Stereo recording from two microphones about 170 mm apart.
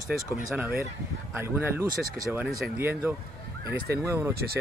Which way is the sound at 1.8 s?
55° right (ahead or behind).